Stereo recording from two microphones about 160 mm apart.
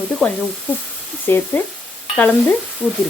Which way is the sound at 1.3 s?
10° left (ahead or behind).